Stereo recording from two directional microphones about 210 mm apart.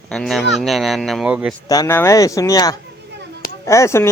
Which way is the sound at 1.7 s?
15° left (ahead or behind).